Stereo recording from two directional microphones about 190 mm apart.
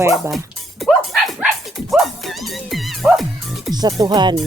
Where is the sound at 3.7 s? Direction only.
20° right (ahead or behind).